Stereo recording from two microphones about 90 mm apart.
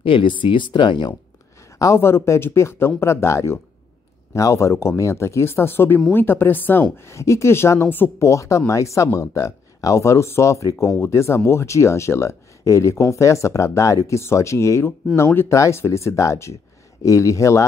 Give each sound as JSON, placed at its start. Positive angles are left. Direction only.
{"t": 0.0, "sound": "speech", "side_deg": 70}
{"t": 1.8, "sound": "speech", "side_deg": 30}
{"t": 8.3, "sound": "speech", "side_deg": 35}